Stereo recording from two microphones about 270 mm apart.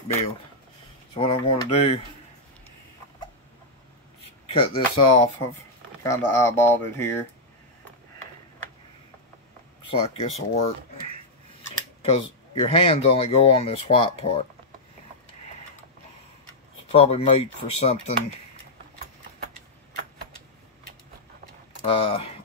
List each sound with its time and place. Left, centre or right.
1.1 s speech: centre
4.5 s speech: centre
9.8 s speech: left
16.9 s speech: left
21.8 s speech: centre